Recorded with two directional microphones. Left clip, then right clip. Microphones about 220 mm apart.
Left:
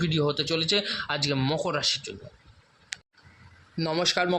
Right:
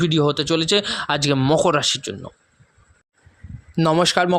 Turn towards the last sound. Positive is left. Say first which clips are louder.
# right 8 dB
turn(degrees=-40)  # may be behind; listen again after turning